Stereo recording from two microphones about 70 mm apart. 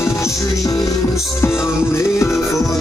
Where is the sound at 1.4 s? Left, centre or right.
Left.